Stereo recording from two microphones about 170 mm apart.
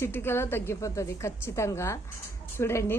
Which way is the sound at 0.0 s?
15° left (ahead or behind).